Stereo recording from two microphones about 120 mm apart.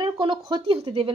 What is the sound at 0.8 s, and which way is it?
Speech, 55° right (ahead or behind).